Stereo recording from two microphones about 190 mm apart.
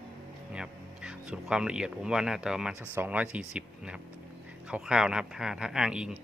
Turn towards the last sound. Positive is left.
turn(degrees=-5)  # may be behind; listen again after turning